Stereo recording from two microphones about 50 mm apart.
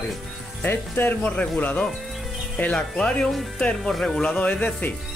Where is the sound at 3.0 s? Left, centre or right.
Left.